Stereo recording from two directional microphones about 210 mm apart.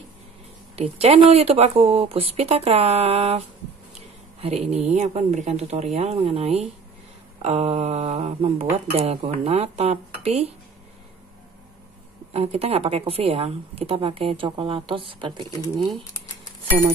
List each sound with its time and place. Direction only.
0.7 s a woman's voice: 30° right (ahead or behind)
12.3 s a woman's voice: 30° right (ahead or behind)